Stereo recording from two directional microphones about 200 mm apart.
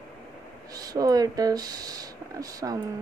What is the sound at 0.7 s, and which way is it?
Speech, 20° right (ahead or behind).